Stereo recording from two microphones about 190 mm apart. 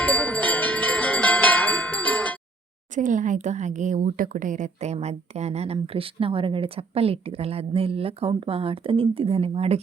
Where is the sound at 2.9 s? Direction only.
40° right (ahead or behind).